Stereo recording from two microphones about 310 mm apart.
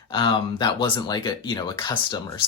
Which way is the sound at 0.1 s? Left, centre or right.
Centre.